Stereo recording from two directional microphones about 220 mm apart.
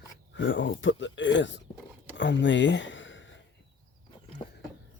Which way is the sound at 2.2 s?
55° left (ahead or behind).